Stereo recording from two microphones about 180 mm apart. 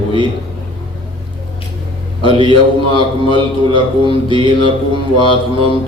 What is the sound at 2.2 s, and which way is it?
Speech, 30° right (ahead or behind).